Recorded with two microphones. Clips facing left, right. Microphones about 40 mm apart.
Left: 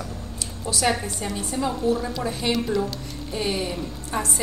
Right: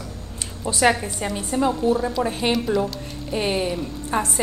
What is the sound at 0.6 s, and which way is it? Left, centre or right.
Speech, right.